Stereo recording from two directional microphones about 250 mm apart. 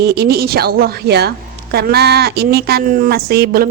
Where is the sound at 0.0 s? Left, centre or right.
Right.